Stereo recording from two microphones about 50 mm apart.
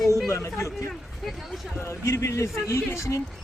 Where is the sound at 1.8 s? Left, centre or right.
Left.